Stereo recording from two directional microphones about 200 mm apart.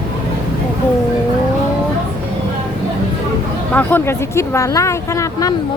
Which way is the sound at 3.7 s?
10° left (ahead or behind).